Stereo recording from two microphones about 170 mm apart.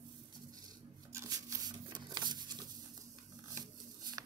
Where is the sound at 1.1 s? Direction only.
20° right (ahead or behind).